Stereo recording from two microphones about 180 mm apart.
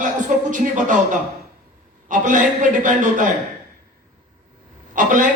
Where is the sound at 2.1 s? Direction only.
45° right (ahead or behind).